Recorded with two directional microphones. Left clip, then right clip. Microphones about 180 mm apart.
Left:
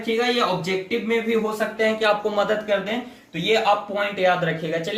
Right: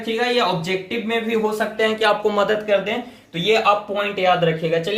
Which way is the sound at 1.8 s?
45° right (ahead or behind).